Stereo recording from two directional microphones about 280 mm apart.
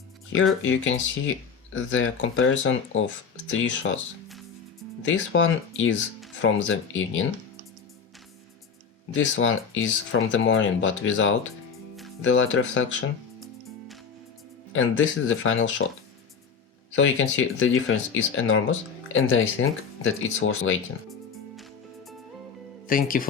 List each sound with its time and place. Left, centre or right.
1.7 s speech: left
4.3 s music: centre
5.0 s speech: left
9.1 s speech: left
14.7 s speech: left
16.9 s speech: left
21.1 s music: centre
22.9 s speech: left